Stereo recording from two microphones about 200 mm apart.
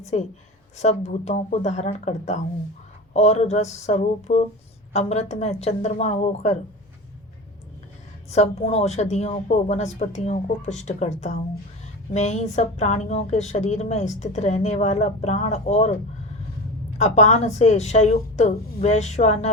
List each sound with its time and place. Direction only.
0.1 s a woman's voice: 30° left (ahead or behind)
8.3 s a woman's voice: 35° left (ahead or behind)
17.0 s a woman's voice: 35° left (ahead or behind)